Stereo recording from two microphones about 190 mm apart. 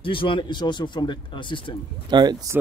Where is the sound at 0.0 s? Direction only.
25° left (ahead or behind).